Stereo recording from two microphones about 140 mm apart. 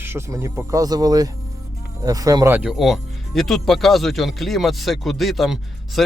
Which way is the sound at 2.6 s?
Centre (ahead or behind).